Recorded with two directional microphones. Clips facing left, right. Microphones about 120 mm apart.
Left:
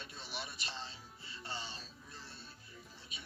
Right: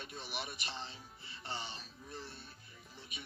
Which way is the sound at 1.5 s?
15° right (ahead or behind).